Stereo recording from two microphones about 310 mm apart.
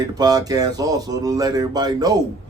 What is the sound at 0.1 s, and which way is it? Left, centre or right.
A man's voice, centre.